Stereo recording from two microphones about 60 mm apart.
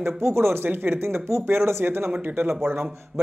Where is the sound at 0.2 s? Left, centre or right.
Right.